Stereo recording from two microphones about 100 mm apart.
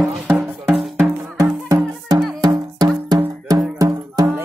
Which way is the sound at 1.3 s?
35° right (ahead or behind).